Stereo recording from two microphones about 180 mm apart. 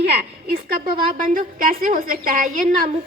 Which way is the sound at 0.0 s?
65° right (ahead or behind).